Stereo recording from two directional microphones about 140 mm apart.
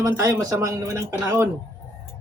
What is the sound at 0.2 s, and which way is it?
Speech, 20° right (ahead or behind).